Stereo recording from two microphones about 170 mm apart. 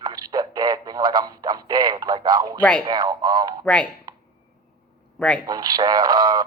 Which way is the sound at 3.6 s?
5° left (ahead or behind).